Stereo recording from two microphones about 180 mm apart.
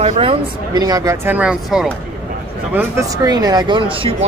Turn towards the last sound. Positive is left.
turn(degrees=-30)  # may be behind; listen again after turning